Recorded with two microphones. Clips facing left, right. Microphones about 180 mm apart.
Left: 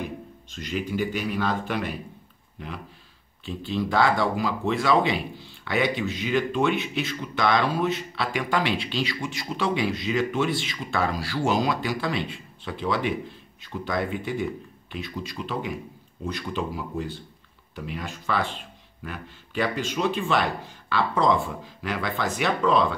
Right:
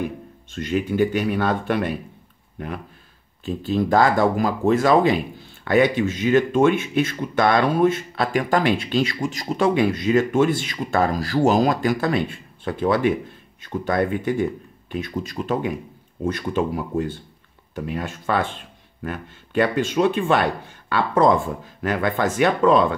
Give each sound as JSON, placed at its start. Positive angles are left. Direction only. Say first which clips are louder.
{"t": 0.6, "sound": "speech", "louder": "right 7 dB", "side_deg": -55}
{"t": 3.4, "sound": "speech", "louder": "right 6 dB", "side_deg": -45}